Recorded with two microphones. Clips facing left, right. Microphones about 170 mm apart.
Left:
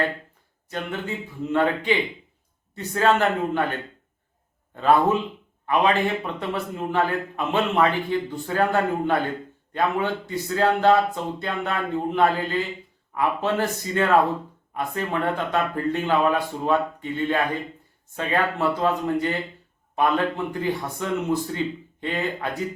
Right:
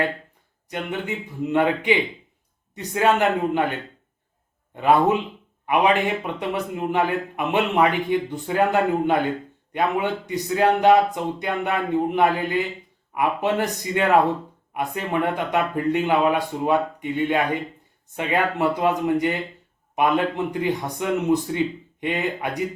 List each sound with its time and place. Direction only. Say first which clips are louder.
0.7 s a man's voice: right 2 dB; 20° right (ahead or behind)